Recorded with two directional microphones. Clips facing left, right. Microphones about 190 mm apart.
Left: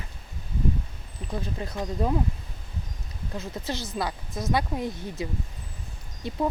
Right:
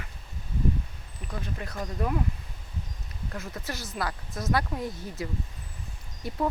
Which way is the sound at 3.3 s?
20° left (ahead or behind).